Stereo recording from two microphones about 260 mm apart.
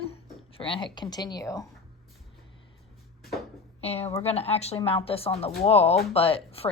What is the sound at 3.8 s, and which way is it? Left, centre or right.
A woman's voice, left.